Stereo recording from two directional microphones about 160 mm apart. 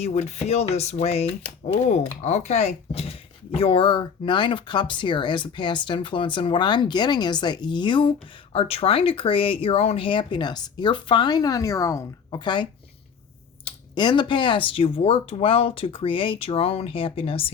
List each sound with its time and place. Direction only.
0.0 s speech: 45° left (ahead or behind); by 12.6 s 30° left (ahead or behind)
13.7 s speech: 30° left (ahead or behind)